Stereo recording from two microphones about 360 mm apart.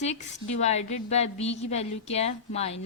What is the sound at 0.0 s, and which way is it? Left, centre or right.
A woman's voice, centre.